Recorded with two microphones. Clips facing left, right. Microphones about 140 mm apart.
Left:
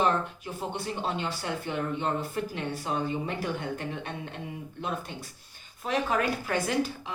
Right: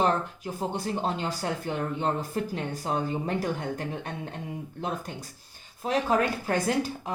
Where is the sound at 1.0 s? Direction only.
40° right (ahead or behind).